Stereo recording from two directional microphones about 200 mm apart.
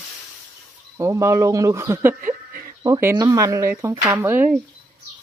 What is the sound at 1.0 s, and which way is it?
Speech, 15° right (ahead or behind).